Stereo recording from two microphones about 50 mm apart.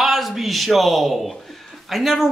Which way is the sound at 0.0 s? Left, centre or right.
Centre.